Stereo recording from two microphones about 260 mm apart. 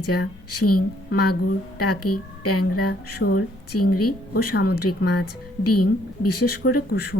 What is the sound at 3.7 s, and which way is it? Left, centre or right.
Speech, left.